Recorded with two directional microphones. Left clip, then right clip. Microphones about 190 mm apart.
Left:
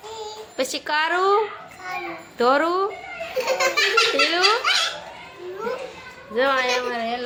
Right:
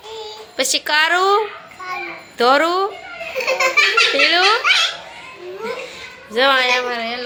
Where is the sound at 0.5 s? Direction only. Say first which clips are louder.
Right 6 dB; 5° left (ahead or behind).